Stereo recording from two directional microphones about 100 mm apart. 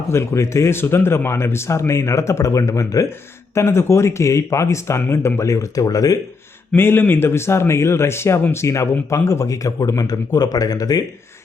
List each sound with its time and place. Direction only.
0.1 s a man's voice: 30° left (ahead or behind)
6.7 s a man's voice: 20° left (ahead or behind); by 11.0 s 40° left (ahead or behind)